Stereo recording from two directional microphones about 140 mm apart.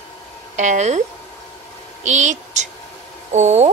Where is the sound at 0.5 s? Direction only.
60° right (ahead or behind).